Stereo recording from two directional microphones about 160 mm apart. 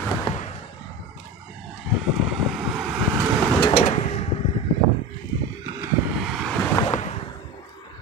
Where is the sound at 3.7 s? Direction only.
45° left (ahead or behind).